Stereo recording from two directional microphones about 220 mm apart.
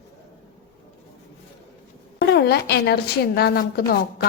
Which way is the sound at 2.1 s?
50° left (ahead or behind).